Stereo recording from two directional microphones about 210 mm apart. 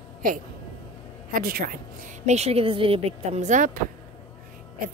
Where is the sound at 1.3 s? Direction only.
45° right (ahead or behind).